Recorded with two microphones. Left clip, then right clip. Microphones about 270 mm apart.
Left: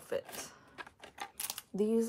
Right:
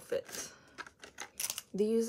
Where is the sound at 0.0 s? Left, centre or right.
Right.